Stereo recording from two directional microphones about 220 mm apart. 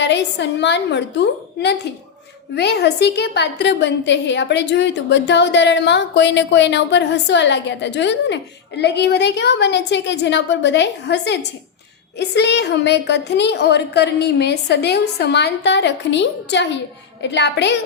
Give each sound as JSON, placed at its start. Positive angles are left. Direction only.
{"t": 0.0, "sound": "a woman's voice", "side_deg": 55}